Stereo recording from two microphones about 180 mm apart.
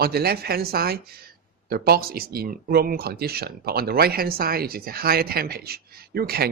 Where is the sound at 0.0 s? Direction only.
60° right (ahead or behind).